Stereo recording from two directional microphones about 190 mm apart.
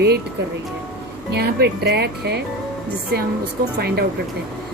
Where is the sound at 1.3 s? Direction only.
60° right (ahead or behind).